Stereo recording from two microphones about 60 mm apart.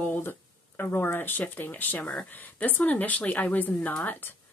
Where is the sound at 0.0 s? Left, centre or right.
Left.